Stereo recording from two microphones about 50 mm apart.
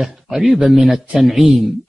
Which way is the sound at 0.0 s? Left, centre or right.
Centre.